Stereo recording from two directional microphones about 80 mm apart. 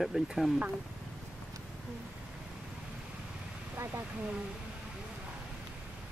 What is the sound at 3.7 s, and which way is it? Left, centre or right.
Speech, right.